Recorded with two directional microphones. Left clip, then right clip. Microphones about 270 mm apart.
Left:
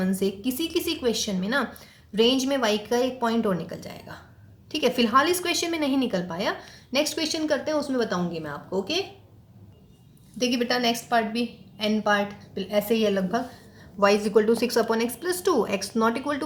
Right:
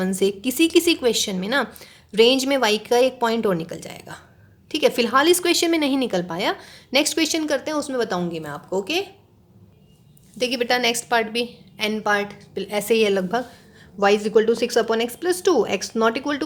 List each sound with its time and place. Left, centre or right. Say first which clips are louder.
0.0 s a woman's voice: right 5 dB; right
10.3 s a woman's voice: right 4 dB; right
14.0 s a woman's voice: right 3 dB; right